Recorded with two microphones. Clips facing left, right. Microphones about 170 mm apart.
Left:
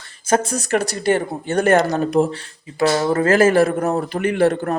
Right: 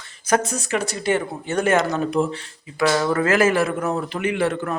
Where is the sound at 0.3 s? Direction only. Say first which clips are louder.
Left 3 dB; 35° left (ahead or behind).